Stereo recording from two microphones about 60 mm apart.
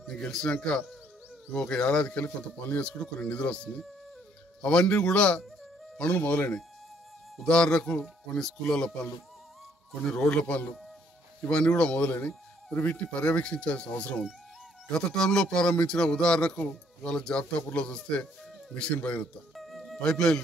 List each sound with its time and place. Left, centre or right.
0.0 s a man's voice: centre
8.6 s a man's voice: centre
19.5 s music: centre
20.0 s a man's voice: centre